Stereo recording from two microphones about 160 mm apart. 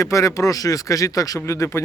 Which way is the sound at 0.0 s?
20° left (ahead or behind).